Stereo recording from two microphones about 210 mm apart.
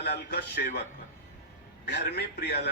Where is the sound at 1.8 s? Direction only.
50° left (ahead or behind).